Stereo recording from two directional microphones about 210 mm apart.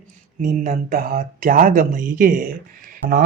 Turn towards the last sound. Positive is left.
turn(degrees=-40)  # may be behind; listen again after turning